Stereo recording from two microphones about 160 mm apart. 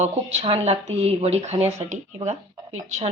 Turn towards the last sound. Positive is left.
turn(degrees=-45)  # may be behind; listen again after turning